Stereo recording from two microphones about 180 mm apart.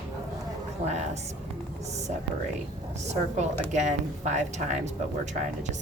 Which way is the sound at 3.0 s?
40° right (ahead or behind).